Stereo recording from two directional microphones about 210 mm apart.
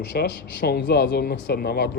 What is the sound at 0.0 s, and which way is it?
Speech, 55° left (ahead or behind).